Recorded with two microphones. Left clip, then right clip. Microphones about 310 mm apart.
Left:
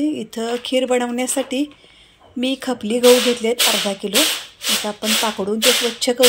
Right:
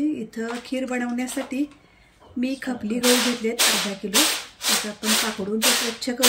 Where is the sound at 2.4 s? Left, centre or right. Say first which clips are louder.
Left 6 dB; left.